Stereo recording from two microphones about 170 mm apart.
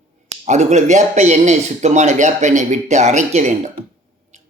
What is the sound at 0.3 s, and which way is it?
Speech, 45° right (ahead or behind).